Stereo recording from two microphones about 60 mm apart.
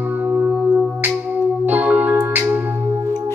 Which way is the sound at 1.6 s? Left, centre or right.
Right.